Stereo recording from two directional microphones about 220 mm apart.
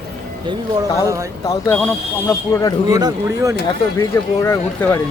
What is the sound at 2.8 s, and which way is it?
Speech, 15° right (ahead or behind).